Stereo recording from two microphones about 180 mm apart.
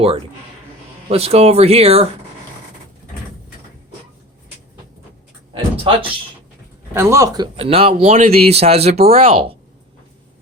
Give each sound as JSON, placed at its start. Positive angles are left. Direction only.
{"t": 1.0, "sound": "speech", "side_deg": -35}
{"t": 5.9, "sound": "a man's voice", "side_deg": -30}
{"t": 6.9, "sound": "a man's voice", "side_deg": -15}
{"t": 7.5, "sound": "speech", "side_deg": -30}